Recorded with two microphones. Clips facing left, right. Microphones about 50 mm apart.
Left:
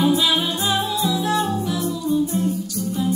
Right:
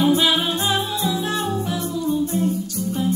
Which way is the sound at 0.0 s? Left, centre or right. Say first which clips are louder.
Right 1 dB; right.